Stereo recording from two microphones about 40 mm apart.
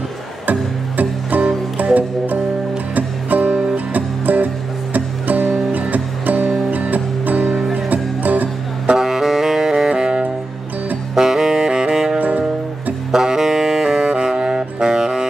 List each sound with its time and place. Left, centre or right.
0.5 s music: right
8.9 s saxophone: centre
11.1 s saxophone: centre
12.2 s music: right
13.1 s saxophone: centre